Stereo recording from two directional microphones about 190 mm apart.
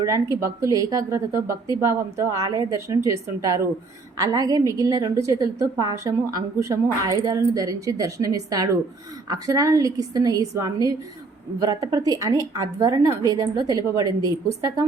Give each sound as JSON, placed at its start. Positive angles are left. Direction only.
{"t": 0.0, "sound": "a woman's voice", "side_deg": -15}